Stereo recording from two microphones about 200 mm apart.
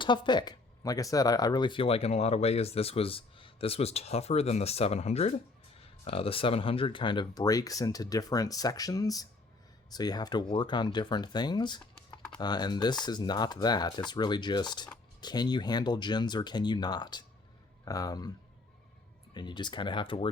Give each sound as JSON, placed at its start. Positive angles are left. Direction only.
{"t": 0.0, "sound": "speech", "side_deg": 20}
{"t": 19.3, "sound": "speech", "side_deg": 20}